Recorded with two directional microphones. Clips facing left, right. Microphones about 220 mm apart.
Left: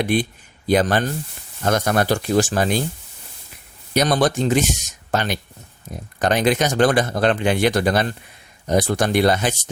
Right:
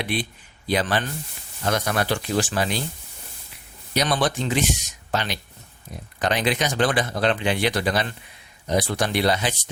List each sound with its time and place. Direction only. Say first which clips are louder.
0.0 s speech: left 7 dB; 45° left (ahead or behind)
3.9 s speech: left 5 dB; 40° left (ahead or behind)